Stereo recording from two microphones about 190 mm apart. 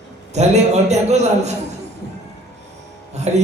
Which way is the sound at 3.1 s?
35° right (ahead or behind).